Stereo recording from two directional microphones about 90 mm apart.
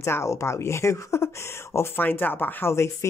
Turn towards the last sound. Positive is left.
turn(degrees=30)  # may be behind; listen again after turning